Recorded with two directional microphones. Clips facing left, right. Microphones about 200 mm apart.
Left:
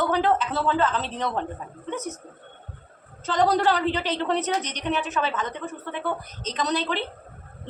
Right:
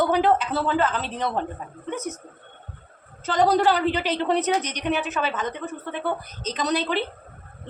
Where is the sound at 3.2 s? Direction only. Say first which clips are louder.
Right 2 dB; 5° right (ahead or behind).